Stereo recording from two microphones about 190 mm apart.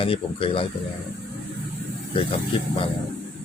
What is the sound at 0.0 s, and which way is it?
Speech, 30° left (ahead or behind).